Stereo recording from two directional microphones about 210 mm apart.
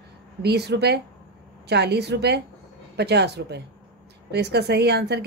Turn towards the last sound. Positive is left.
turn(degrees=-50)  # may be behind; listen again after turning